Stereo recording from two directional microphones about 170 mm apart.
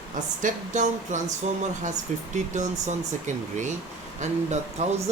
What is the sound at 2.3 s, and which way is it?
Speech, 45° right (ahead or behind).